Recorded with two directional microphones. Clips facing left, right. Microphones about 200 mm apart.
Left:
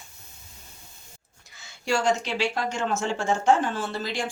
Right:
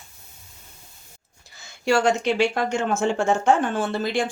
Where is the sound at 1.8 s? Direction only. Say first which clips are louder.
Right 4 dB; 60° right (ahead or behind).